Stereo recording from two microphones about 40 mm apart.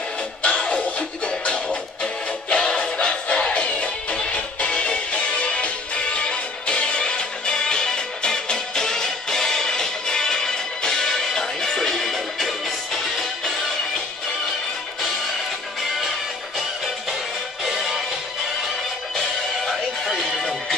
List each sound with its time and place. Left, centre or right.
0.4 s music: left; by 13.3 s centre
16.0 s music: centre
19.1 s music: centre